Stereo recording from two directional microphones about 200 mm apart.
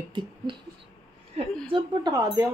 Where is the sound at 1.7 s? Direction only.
20° right (ahead or behind).